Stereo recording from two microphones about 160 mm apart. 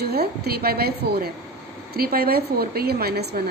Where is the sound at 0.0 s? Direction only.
80° right.